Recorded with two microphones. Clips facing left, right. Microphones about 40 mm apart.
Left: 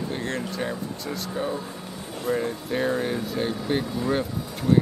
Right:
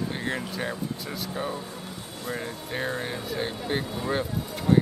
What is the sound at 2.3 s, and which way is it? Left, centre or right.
Speech, centre.